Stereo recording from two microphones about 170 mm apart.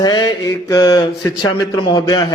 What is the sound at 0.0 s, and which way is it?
A man's voice, 25° left (ahead or behind).